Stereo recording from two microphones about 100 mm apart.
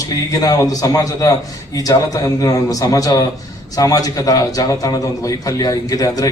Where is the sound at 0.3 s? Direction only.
40° left (ahead or behind).